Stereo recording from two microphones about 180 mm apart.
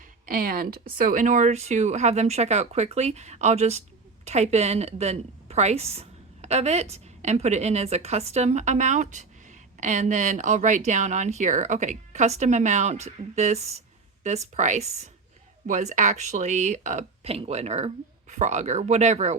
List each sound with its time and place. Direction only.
0.0 s a woman's voice: 50° right (ahead or behind)